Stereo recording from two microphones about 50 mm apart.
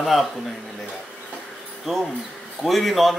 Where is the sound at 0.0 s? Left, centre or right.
Centre.